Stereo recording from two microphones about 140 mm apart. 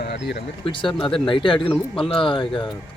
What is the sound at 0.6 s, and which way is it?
Speech, 40° left (ahead or behind).